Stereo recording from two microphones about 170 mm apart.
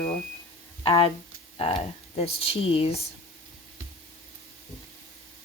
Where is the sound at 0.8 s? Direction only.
35° left (ahead or behind).